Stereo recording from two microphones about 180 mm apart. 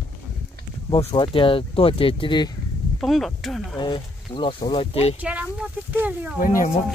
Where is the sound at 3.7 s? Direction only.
25° left (ahead or behind).